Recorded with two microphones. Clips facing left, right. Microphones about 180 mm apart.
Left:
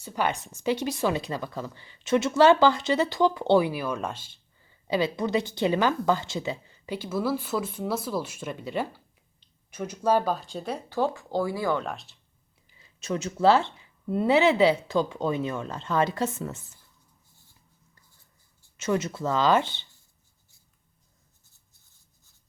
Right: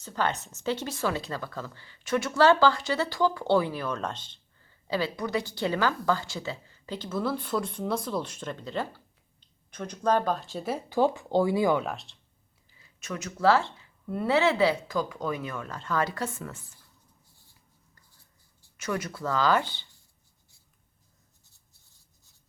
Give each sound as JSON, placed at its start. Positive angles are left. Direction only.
{"t": 0.0, "sound": "a woman's voice", "side_deg": 10}
{"t": 11.9, "sound": "speech", "side_deg": 0}
{"t": 12.8, "sound": "speech", "side_deg": 25}
{"t": 18.8, "sound": "speech", "side_deg": 25}